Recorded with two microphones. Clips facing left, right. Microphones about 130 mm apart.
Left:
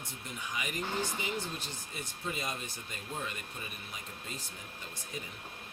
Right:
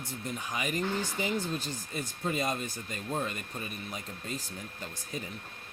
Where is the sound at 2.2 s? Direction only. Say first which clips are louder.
Right 7 dB; 45° right (ahead or behind).